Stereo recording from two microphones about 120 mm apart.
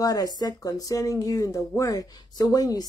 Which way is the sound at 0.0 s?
30° left (ahead or behind).